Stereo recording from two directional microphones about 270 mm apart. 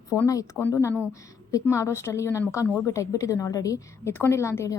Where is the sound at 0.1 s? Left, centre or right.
Centre.